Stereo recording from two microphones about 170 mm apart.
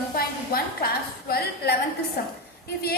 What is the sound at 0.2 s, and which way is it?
A woman's voice, 60° left (ahead or behind).